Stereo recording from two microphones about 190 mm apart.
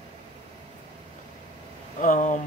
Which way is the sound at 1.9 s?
45° left (ahead or behind).